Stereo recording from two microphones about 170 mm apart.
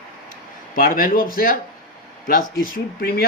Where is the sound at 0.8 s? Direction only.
60° left (ahead or behind).